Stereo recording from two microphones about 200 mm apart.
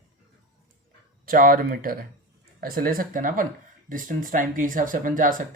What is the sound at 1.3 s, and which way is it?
Speech, 45° right (ahead or behind).